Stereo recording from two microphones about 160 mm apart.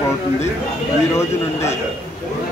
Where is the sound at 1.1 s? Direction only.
15° left (ahead or behind).